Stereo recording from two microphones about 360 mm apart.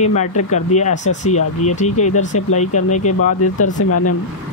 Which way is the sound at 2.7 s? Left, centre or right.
Left.